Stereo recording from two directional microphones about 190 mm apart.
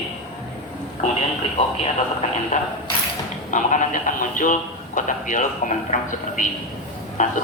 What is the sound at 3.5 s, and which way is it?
Speech, 40° left (ahead or behind).